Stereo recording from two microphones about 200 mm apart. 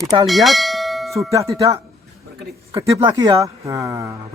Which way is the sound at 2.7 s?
20° right (ahead or behind).